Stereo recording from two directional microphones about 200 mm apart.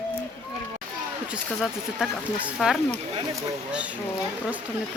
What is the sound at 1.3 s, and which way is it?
Speech, 5° right (ahead or behind).